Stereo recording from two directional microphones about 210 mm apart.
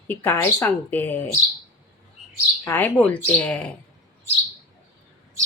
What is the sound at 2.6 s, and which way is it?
A woman's voice, 10° left (ahead or behind).